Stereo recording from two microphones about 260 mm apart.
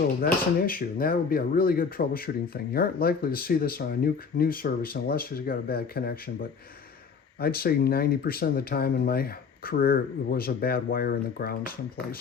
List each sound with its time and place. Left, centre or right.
0.2 s speech: left
7.3 s speech: left